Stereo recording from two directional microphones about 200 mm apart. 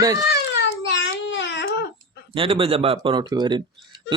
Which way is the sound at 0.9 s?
65° left (ahead or behind).